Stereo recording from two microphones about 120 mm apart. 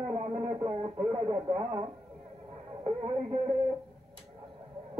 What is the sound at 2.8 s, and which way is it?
Speech, 50° right (ahead or behind).